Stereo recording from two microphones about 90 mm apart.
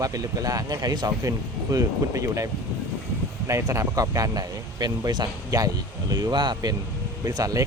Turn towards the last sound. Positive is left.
turn(degrees=-40)  # may be behind; listen again after turning